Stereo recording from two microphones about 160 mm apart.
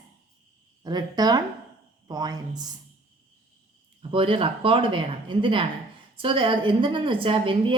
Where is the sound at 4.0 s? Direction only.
35° right (ahead or behind).